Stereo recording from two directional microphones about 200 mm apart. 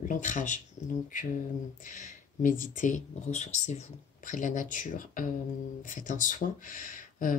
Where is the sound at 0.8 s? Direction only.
35° left (ahead or behind).